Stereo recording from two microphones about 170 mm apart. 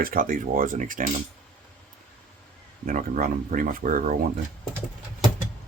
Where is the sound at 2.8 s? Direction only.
55° right (ahead or behind).